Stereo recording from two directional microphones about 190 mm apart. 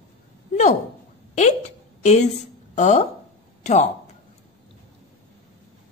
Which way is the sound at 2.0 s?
35° left (ahead or behind).